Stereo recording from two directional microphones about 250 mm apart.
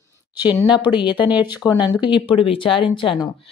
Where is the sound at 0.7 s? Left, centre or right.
Centre.